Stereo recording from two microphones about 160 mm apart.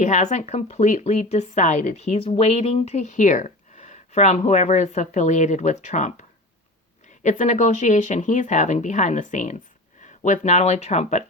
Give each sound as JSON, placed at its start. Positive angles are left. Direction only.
{"t": 0.0, "sound": "a woman's voice", "side_deg": 50}